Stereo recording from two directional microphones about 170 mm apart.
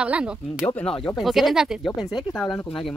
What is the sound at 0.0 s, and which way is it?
Speech, 5° right (ahead or behind).